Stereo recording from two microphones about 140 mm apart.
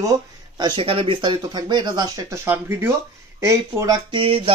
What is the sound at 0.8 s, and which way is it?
Speech, 40° right (ahead or behind).